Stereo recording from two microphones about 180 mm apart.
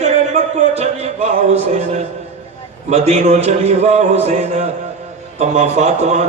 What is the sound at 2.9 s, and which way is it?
A man's voice, 40° right (ahead or behind).